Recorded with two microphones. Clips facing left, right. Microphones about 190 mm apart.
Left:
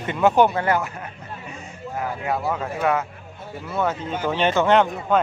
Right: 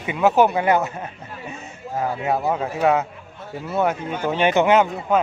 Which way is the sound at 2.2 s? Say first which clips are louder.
Right 2 dB; 20° right (ahead or behind).